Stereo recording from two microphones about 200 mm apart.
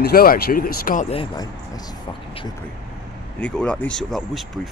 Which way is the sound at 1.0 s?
25° left (ahead or behind).